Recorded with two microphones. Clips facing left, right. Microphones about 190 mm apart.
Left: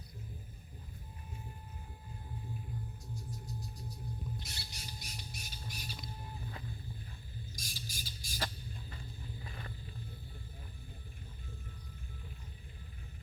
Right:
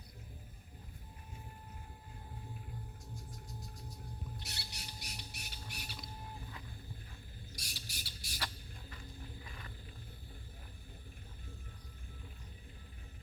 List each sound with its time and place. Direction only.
4.4 s squawk: 65° right (ahead or behind)
7.5 s squawk: 70° right (ahead or behind)